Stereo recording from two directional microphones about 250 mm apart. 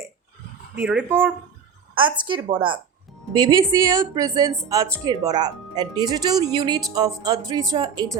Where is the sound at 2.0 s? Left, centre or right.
Centre.